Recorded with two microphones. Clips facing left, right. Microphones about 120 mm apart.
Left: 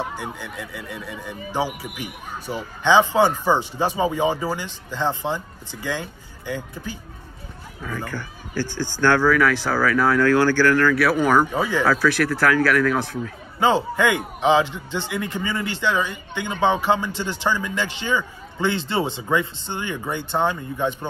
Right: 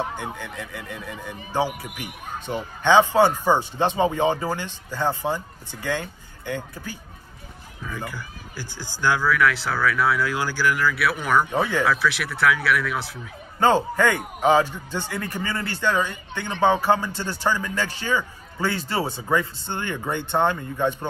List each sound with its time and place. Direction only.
0.2 s speech: 10° left (ahead or behind)
4.6 s speech: 10° right (ahead or behind)
5.8 s speech: 10° left (ahead or behind)
8.0 s speech: 10° right (ahead or behind)
9.2 s speech: centre (ahead or behind)
11.0 s speech: centre (ahead or behind)
13.6 s speech: 15° left (ahead or behind)